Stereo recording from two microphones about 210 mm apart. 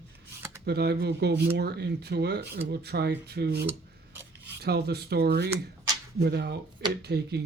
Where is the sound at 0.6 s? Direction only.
50° right (ahead or behind).